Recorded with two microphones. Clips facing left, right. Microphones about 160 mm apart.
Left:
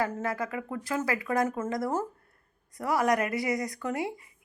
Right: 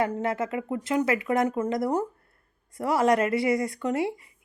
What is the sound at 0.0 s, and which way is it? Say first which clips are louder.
Speech: right 4 dB; 25° right (ahead or behind).